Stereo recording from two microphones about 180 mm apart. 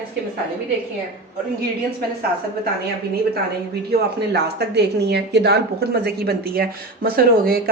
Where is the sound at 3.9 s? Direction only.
65° right (ahead or behind).